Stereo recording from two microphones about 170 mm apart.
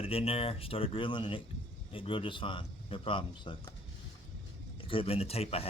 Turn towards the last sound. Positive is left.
turn(degrees=35)  # may be behind; listen again after turning